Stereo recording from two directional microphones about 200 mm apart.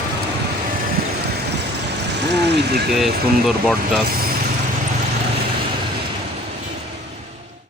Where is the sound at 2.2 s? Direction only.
55° right (ahead or behind).